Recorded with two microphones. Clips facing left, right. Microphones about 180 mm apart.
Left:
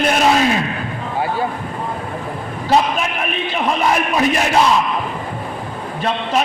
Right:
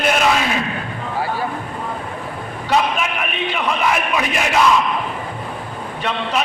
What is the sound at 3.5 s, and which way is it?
Speech, 35° left (ahead or behind).